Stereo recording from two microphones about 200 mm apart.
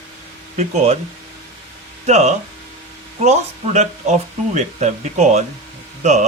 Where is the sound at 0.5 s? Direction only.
35° right (ahead or behind).